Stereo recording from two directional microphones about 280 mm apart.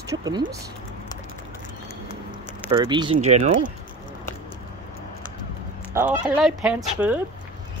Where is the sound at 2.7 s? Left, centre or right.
Centre.